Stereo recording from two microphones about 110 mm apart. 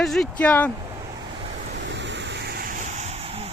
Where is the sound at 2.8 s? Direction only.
90° right; by 3.5 s 70° right (ahead or behind).